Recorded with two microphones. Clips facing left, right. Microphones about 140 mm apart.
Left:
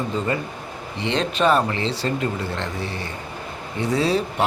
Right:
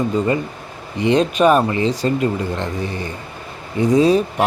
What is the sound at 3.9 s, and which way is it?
Speech, 15° right (ahead or behind).